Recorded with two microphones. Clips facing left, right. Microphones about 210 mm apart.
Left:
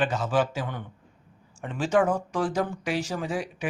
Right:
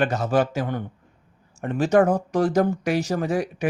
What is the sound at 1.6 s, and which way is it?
Speech, 55° right (ahead or behind).